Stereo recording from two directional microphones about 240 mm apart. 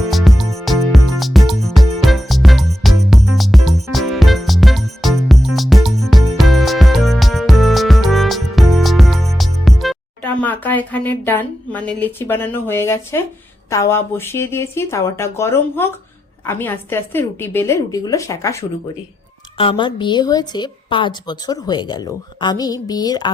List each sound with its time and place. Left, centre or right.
0.1 s music: centre
13.7 s a woman's voice: centre
19.5 s a woman's voice: left